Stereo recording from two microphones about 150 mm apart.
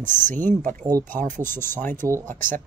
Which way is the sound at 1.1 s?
60° right (ahead or behind).